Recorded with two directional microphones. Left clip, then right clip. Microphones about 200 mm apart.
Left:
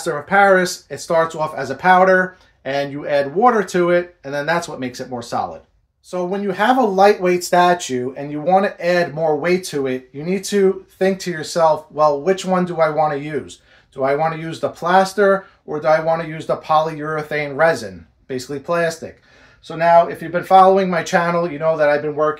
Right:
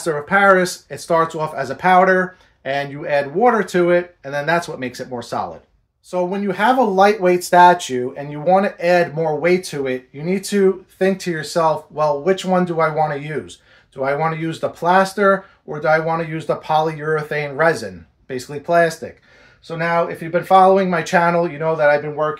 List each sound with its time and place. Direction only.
0.0 s speech: 20° right (ahead or behind)
20.3 s speech: 20° right (ahead or behind)